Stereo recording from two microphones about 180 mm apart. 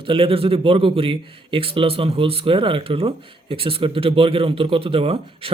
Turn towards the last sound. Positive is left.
turn(degrees=-30)  # may be behind; listen again after turning